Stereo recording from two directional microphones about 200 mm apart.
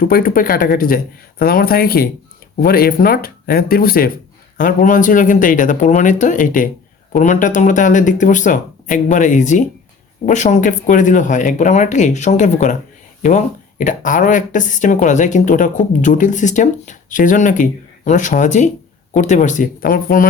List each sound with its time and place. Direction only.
0.0 s speech: 45° left (ahead or behind)